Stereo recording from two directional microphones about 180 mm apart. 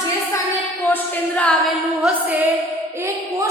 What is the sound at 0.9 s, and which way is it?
Speech, 5° left (ahead or behind).